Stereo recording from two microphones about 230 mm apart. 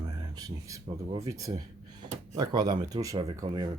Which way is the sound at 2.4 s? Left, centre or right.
Centre.